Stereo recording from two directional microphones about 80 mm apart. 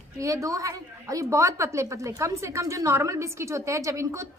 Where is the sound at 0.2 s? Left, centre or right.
Right.